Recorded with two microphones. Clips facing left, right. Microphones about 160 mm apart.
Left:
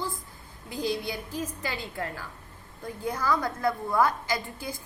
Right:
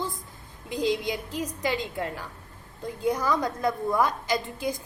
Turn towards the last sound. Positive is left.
turn(degrees=-20)  # may be behind; listen again after turning